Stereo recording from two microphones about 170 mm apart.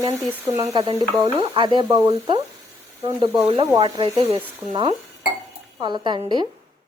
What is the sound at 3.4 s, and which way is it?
Speech, 35° right (ahead or behind).